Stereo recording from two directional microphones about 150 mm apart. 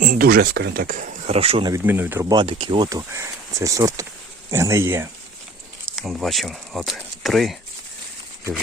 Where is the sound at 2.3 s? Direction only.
30° right (ahead or behind).